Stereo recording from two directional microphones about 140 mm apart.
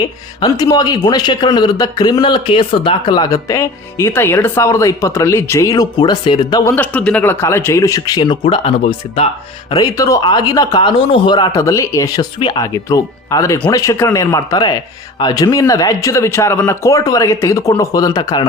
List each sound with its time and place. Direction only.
0.3 s a man's voice: 30° left (ahead or behind)
6.7 s a man's voice: 10° left (ahead or behind); by 9.7 s 40° left (ahead or behind)
9.7 s speech: 25° left (ahead or behind)
11.6 s a man's voice: 20° left (ahead or behind)